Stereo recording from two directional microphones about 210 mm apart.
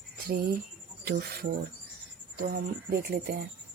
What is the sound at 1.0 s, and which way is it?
Speech, 50° right (ahead or behind).